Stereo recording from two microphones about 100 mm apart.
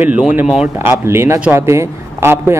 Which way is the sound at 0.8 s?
25° right (ahead or behind).